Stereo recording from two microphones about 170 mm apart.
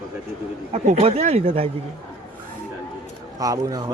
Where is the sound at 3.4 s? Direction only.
20° right (ahead or behind).